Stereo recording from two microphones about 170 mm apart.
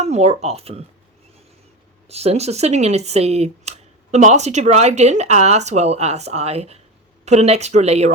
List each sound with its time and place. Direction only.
0.0 s speech: 40° right (ahead or behind)
2.0 s speech: 40° right (ahead or behind)